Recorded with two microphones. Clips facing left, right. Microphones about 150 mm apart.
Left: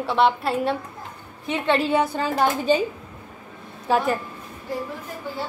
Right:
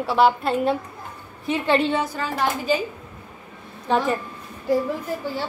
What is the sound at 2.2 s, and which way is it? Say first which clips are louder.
Speech: left 3 dB; 25° left (ahead or behind).